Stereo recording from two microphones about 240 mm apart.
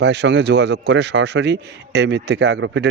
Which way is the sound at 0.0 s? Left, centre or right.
Right.